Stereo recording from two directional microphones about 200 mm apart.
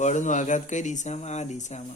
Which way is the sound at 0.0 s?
35° left (ahead or behind).